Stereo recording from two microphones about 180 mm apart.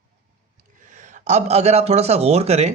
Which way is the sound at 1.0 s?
40° right (ahead or behind).